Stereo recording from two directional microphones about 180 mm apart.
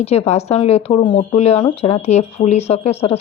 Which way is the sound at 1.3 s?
35° left (ahead or behind).